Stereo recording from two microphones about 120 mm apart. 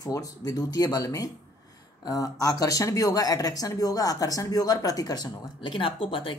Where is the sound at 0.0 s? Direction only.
30° left (ahead or behind).